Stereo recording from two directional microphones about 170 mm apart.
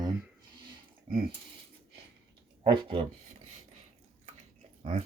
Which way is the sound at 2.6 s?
30° right (ahead or behind).